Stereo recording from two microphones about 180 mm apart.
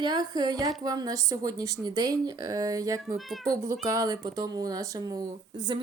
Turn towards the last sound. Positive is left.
turn(degrees=-20)  # may be behind; listen again after turning